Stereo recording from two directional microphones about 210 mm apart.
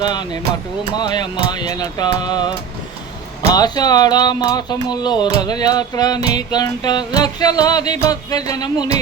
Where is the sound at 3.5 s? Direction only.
20° left (ahead or behind).